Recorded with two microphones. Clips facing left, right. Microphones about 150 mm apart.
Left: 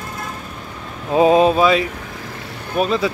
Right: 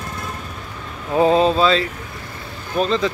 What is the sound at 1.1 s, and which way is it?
Speech, 15° left (ahead or behind).